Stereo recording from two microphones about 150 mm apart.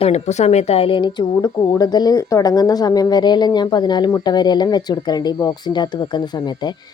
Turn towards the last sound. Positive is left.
turn(degrees=30)  # may be behind; listen again after turning